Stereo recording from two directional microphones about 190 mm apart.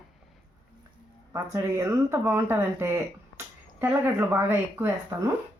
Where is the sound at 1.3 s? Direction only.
15° right (ahead or behind).